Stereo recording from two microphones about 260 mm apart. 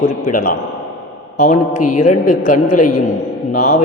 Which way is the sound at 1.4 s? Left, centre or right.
Left.